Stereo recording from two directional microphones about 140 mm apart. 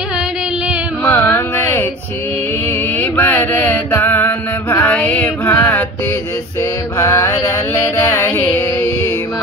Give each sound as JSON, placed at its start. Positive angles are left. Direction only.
{"t": 1.0, "sound": "carnatic music", "side_deg": 20}
{"t": 3.0, "sound": "mantra", "side_deg": 15}